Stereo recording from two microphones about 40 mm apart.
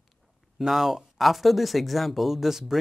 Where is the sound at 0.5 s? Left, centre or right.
Centre.